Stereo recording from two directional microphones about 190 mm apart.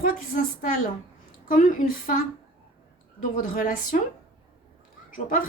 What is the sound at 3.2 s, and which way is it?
Speech, 45° left (ahead or behind).